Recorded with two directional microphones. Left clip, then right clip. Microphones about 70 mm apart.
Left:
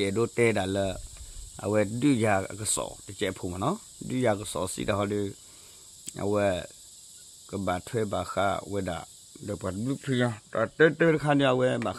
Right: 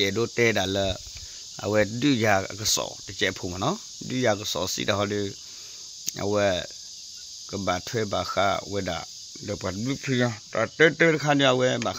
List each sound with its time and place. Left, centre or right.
0.0 s speech: centre
0.7 s speech: centre
4.1 s speech: centre
10.0 s speech: right
10.8 s speech: centre